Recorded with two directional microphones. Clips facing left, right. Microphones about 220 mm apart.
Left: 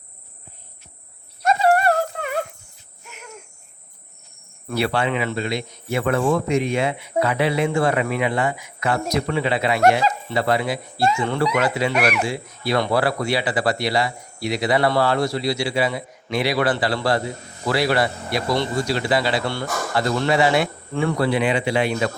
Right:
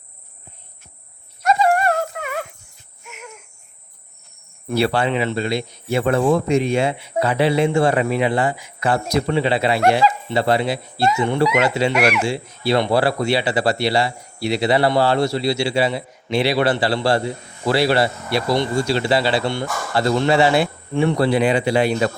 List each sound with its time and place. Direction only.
1.6 s a sound: 35° left (ahead or behind)
4.7 s speech: 30° right (ahead or behind)
21.2 s speech: 35° right (ahead or behind)